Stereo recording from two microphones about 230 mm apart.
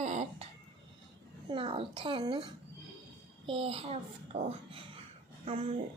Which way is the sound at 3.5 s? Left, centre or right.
Right.